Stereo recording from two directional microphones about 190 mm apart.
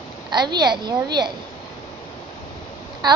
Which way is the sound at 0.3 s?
20° right (ahead or behind).